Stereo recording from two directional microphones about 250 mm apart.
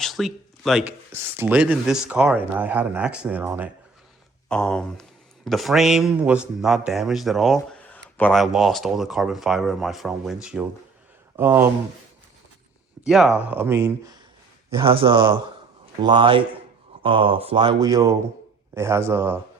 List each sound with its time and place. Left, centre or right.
0.0 s speech: centre
4.4 s speech: centre
13.1 s speech: centre